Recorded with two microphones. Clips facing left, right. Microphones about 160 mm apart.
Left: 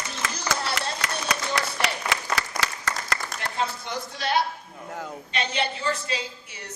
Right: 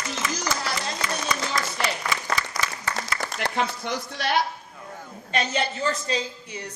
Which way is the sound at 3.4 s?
65° right (ahead or behind).